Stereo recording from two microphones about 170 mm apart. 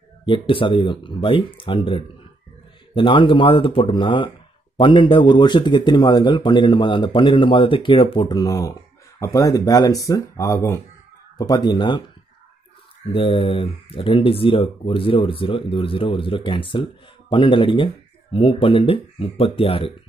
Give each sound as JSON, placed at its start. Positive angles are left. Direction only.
{"t": 0.2, "sound": "a man's voice", "side_deg": 30}
{"t": 13.1, "sound": "a man's voice", "side_deg": 30}